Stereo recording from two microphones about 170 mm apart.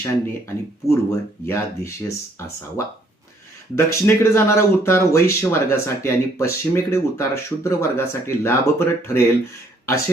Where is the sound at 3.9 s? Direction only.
15° left (ahead or behind).